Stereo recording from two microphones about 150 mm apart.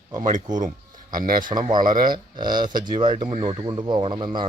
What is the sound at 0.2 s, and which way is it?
Speech, 55° right (ahead or behind).